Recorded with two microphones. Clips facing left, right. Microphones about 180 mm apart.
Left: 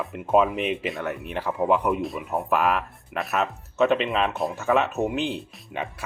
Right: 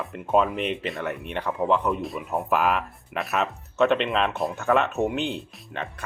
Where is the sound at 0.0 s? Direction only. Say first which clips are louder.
Left 2 dB; centre (ahead or behind).